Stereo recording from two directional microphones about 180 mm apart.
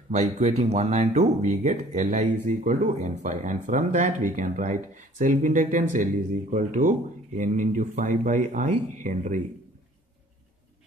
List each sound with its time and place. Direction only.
0.1 s speech: 40° right (ahead or behind)